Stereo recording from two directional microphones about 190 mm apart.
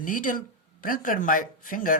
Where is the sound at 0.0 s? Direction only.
45° left (ahead or behind).